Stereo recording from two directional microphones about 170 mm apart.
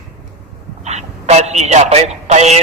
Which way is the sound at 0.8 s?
40° right (ahead or behind).